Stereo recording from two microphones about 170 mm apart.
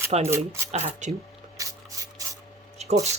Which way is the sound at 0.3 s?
15° right (ahead or behind).